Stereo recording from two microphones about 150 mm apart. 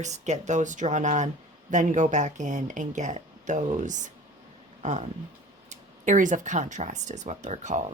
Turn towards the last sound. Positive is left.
turn(degrees=-50)  # may be behind; listen again after turning